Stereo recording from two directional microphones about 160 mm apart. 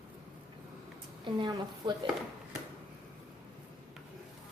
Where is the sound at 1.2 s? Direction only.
30° right (ahead or behind).